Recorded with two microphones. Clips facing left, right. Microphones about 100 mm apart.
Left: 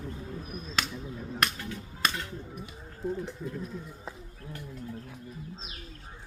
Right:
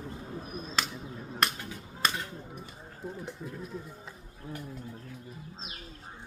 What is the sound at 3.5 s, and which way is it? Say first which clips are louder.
Speech: left 2 dB; centre (ahead or behind).